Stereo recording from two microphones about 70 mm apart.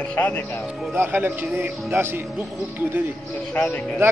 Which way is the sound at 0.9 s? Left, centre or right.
Right.